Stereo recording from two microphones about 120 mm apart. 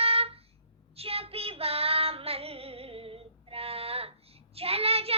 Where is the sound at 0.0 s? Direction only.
55° right (ahead or behind).